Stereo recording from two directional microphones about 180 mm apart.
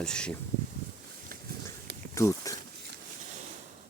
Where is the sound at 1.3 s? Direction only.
50° right (ahead or behind).